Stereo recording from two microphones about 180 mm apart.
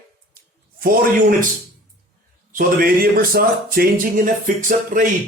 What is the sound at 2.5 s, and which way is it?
A man's voice, 55° right (ahead or behind).